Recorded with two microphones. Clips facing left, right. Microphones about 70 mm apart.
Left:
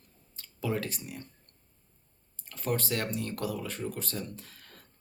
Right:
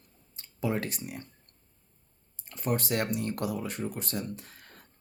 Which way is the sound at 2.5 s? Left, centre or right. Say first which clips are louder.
Right 2 dB; centre.